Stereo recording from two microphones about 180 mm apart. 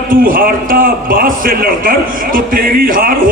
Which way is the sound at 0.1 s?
50° right (ahead or behind).